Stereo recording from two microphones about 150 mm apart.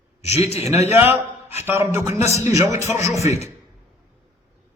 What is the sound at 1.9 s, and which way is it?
A man's voice, 15° right (ahead or behind).